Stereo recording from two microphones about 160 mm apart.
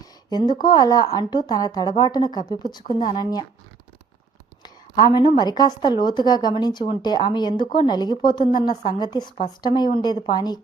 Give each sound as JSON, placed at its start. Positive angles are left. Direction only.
{"t": 0.3, "sound": "speech", "side_deg": 25}
{"t": 4.6, "sound": "a sound", "side_deg": 25}
{"t": 5.4, "sound": "speech", "side_deg": 25}